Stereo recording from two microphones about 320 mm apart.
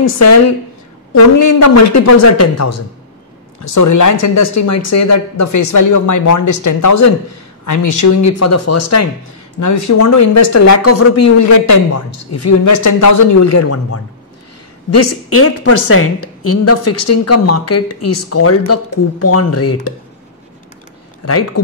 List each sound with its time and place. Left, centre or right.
0.0 s speech: left
7.6 s speech: left